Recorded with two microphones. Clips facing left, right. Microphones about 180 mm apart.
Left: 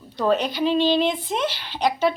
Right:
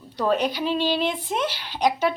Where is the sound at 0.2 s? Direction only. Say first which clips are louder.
Left 2 dB; 10° right (ahead or behind).